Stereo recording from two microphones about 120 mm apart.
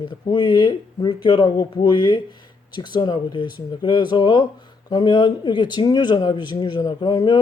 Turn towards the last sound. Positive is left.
turn(degrees=35)  # may be behind; listen again after turning